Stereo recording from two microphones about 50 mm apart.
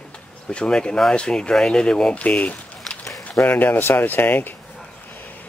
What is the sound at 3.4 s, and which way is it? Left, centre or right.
Speech, left.